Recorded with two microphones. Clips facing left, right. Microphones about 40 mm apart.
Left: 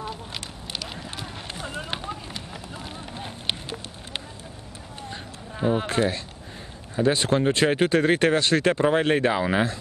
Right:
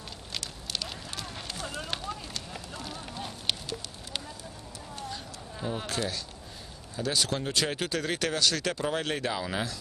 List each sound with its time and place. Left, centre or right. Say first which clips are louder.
0.7 s run: left 3 dB; centre
5.1 s a sound: left 4 dB; left
7.0 s speech: left 9 dB; left